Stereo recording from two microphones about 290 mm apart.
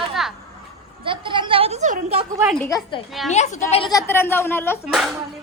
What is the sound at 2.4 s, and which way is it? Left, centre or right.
Speech, centre.